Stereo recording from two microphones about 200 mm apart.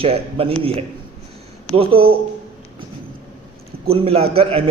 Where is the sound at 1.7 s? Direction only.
25° right (ahead or behind).